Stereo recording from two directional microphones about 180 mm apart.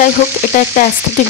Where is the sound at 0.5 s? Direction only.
45° left (ahead or behind).